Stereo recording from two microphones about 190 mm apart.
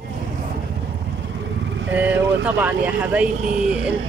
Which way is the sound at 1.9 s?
10° right (ahead or behind).